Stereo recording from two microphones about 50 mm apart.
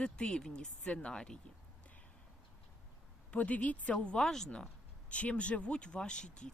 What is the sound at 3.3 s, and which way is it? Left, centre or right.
Speech, left.